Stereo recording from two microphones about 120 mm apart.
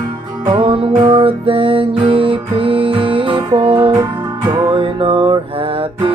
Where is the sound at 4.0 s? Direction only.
35° right (ahead or behind).